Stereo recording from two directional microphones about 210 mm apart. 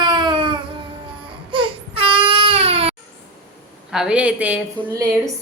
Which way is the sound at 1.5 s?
25° right (ahead or behind).